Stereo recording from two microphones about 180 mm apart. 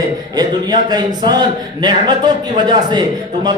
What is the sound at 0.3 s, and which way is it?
A man's voice, 20° right (ahead or behind).